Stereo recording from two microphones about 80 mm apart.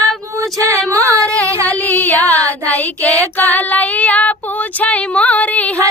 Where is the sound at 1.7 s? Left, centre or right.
Left.